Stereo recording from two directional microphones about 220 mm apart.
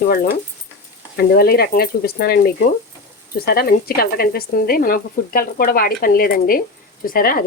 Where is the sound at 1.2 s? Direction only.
45° left (ahead or behind).